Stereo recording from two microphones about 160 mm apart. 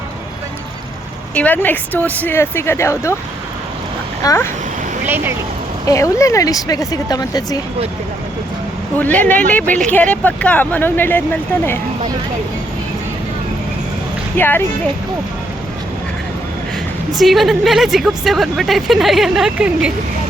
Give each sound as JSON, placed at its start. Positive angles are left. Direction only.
{"t": 1.4, "sound": "speech", "side_deg": 10}
{"t": 4.2, "sound": "speech", "side_deg": 20}
{"t": 5.0, "sound": "speech", "side_deg": -10}
{"t": 5.8, "sound": "speech", "side_deg": 20}
{"t": 9.0, "sound": "speech", "side_deg": 10}
{"t": 14.3, "sound": "speech", "side_deg": 15}
{"t": 17.1, "sound": "speech", "side_deg": 0}